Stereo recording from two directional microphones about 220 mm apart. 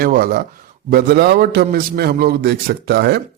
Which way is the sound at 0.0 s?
40° right (ahead or behind).